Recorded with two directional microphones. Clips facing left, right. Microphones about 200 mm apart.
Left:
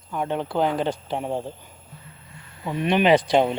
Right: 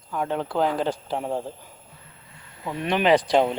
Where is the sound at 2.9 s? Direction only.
20° left (ahead or behind).